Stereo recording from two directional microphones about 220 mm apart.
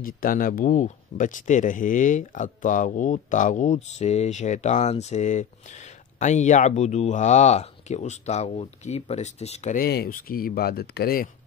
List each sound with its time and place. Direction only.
0.0 s speech: 40° left (ahead or behind)